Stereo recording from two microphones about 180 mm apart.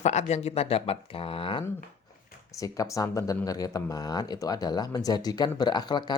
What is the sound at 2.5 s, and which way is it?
Speech, 20° left (ahead or behind).